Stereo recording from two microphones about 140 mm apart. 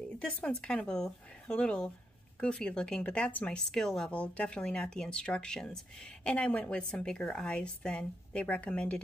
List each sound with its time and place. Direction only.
0.2 s speech: 5° left (ahead or behind)